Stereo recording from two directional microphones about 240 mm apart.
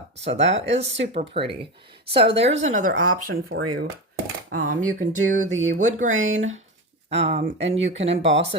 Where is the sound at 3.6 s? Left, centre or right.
Right.